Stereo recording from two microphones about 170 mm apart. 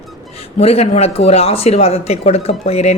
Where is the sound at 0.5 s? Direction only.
35° left (ahead or behind).